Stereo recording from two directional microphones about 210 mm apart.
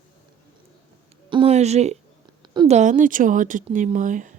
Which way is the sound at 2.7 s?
35° right (ahead or behind).